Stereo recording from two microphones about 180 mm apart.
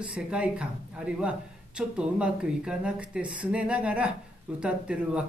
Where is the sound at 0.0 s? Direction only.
5° right (ahead or behind).